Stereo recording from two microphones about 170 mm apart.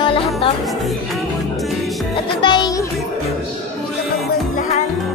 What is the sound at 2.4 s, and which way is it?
Music, 25° left (ahead or behind).